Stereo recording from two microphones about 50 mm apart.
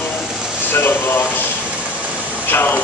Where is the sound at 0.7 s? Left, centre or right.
Left.